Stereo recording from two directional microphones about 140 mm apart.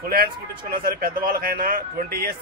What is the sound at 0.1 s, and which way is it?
A man's voice, 90° right.